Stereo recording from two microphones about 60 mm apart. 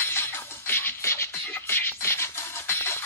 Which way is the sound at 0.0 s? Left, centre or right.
Left.